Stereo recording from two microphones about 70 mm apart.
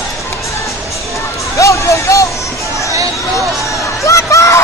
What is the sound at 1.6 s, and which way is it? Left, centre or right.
Music, left.